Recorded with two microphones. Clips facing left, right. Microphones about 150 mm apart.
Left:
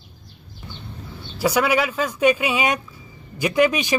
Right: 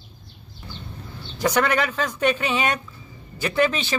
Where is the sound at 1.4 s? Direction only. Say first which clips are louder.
Left 2 dB; 10° left (ahead or behind).